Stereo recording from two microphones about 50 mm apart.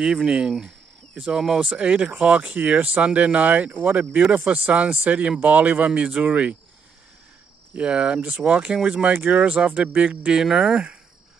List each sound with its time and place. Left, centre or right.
0.0 s cricket: centre
1.8 s speech: right
7.7 s speech: right
8.7 s cricket: centre
9.3 s speech: right
10.4 s cricket: centre